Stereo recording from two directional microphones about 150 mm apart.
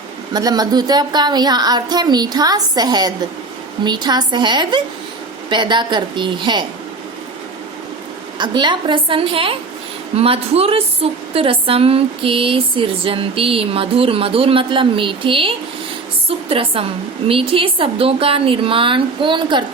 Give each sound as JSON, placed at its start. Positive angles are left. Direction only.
{"t": 0.3, "sound": "a woman's voice", "side_deg": -25}
{"t": 8.4, "sound": "a woman's voice", "side_deg": -30}